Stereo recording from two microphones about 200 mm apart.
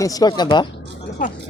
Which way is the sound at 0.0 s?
20° left (ahead or behind).